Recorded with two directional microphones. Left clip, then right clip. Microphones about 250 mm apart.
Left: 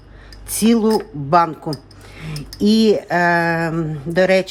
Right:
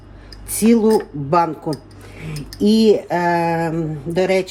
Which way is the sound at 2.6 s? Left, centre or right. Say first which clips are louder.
Right 1 dB; centre.